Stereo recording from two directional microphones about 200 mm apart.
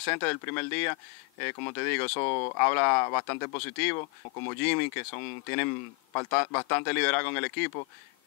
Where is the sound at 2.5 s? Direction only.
15° left (ahead or behind).